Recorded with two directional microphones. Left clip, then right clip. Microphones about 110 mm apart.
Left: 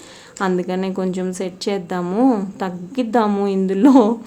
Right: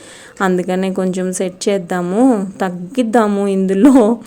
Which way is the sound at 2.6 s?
35° right (ahead or behind).